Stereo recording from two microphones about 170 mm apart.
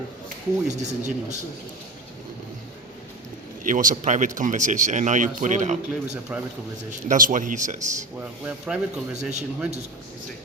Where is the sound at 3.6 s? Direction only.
50° right (ahead or behind).